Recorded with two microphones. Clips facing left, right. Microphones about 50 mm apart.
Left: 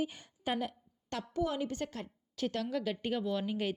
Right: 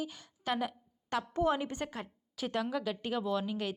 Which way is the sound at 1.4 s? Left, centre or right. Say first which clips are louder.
Right 2 dB; right.